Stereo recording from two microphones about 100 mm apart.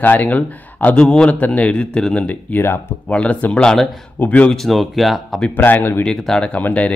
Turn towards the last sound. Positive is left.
turn(degrees=15)  # may be behind; listen again after turning